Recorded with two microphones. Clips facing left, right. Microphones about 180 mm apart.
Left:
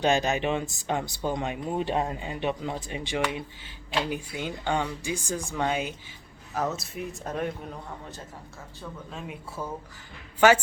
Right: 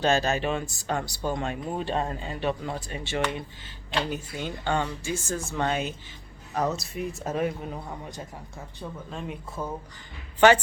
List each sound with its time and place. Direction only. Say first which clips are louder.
0.0 s a man's voice: even; 15° left (ahead or behind); by 8.2 s 10° right (ahead or behind)
9.0 s a man's voice: right 3 dB; centre (ahead or behind)